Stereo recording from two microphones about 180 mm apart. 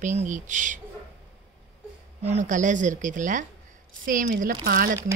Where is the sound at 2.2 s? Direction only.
40° right (ahead or behind).